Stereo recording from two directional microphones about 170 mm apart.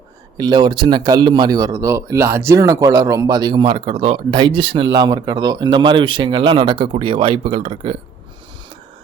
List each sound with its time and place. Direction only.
0.3 s speech: 25° right (ahead or behind)